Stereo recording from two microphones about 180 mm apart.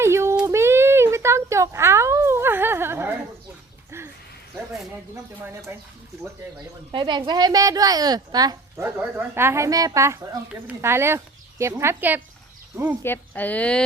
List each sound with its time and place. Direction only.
0.0 s a sound: 15° right (ahead or behind)
5.1 s speech: 15° right (ahead or behind)
6.9 s a woman's voice: 25° right (ahead or behind); by 13.0 s 10° right (ahead or behind)
13.0 s a woman's voice: 10° left (ahead or behind)